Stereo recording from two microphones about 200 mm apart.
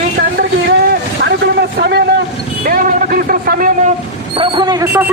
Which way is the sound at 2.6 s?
45° right (ahead or behind).